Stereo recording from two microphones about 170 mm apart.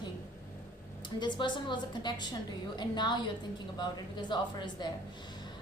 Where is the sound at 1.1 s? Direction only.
25° left (ahead or behind).